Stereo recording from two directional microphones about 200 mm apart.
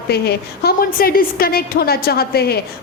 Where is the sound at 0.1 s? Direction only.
55° left (ahead or behind).